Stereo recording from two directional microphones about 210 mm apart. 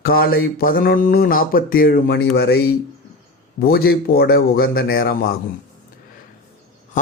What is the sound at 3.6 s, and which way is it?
Speech, 45° left (ahead or behind).